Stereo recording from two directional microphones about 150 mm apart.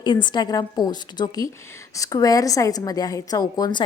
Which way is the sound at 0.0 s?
30° left (ahead or behind).